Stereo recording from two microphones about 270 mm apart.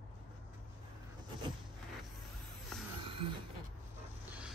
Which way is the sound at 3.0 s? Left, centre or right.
Centre.